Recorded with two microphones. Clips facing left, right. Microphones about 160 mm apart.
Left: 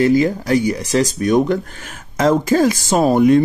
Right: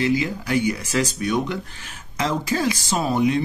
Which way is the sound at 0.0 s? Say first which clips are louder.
Left 8 dB; 45° left (ahead or behind).